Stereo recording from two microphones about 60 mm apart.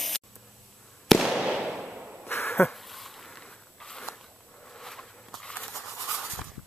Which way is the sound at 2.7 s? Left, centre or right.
Centre.